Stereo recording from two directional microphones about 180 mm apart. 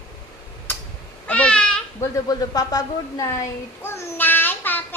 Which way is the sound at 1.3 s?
5° left (ahead or behind).